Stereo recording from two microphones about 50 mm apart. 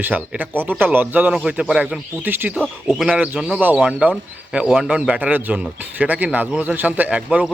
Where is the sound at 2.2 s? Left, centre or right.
Right.